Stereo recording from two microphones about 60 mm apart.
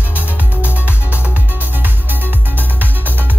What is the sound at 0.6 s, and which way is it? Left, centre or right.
Music, left.